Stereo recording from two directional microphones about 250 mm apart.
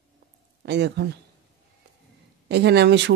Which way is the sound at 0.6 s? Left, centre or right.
Right.